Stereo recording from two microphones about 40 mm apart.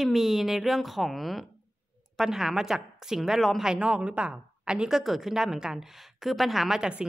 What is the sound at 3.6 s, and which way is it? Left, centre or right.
A woman's voice, right.